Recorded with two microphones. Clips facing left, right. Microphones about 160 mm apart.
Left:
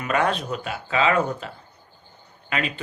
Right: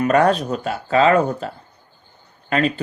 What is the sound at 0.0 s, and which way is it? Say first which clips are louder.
Speech: right 7 dB; 40° right (ahead or behind).